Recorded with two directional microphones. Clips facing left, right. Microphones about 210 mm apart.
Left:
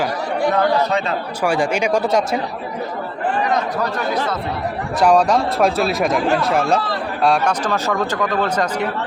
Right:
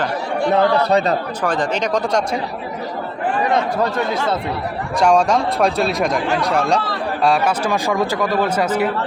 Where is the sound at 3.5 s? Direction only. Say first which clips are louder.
Right 2 dB; 30° right (ahead or behind).